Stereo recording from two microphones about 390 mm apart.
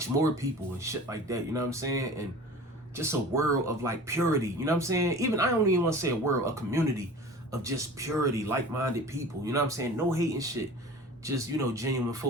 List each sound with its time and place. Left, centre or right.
0.8 s speech: centre